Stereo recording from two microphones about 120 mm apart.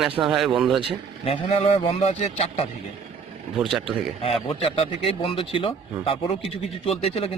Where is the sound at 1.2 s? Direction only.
55° left (ahead or behind).